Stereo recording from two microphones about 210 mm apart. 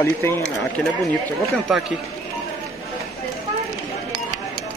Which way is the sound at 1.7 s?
Centre (ahead or behind).